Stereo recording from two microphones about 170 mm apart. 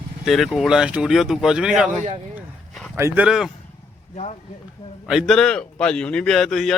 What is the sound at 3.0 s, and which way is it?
Speech, 15° right (ahead or behind).